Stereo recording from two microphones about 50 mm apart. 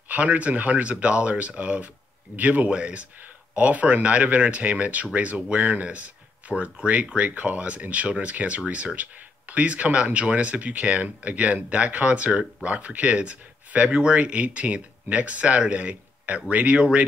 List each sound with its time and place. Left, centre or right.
0.1 s speech: right